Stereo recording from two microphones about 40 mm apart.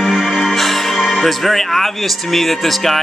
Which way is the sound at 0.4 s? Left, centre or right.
Centre.